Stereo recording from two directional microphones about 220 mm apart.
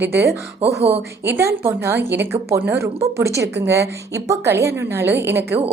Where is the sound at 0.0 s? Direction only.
50° right (ahead or behind).